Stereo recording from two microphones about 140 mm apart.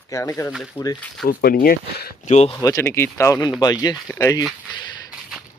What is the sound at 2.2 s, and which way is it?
Speech, 50° left (ahead or behind).